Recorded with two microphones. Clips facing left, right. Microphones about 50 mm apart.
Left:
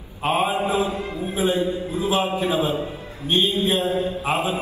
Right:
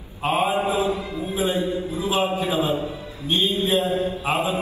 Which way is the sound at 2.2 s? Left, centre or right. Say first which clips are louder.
Even; left.